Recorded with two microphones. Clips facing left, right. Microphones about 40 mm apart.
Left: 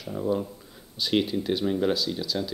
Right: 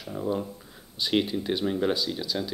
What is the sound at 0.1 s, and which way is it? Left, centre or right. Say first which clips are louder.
A woman's voice: left 2 dB; centre.